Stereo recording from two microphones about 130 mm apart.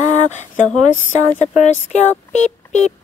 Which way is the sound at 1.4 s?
60° left (ahead or behind).